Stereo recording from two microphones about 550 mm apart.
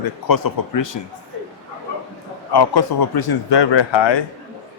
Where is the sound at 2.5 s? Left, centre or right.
Left.